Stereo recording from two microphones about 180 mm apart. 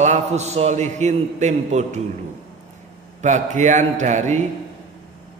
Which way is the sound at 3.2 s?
40° right (ahead or behind).